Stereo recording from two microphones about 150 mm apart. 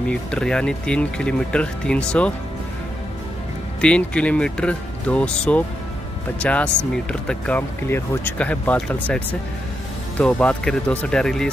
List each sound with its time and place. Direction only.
0.1 s speech: 5° left (ahead or behind)
3.8 s speech: 5° left (ahead or behind)